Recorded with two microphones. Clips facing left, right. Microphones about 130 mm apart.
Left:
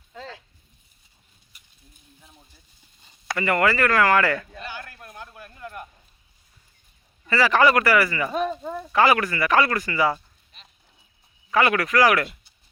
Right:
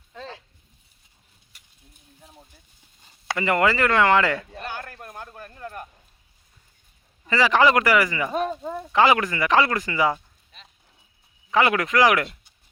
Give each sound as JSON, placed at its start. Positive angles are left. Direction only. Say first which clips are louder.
{"t": 3.2, "sound": "speech", "louder": "even", "side_deg": -20}
{"t": 4.6, "sound": "a sound", "louder": "right 3 dB", "side_deg": -50}
{"t": 7.3, "sound": "speech", "louder": "even", "side_deg": -15}
{"t": 11.5, "sound": "speech", "louder": "even", "side_deg": -20}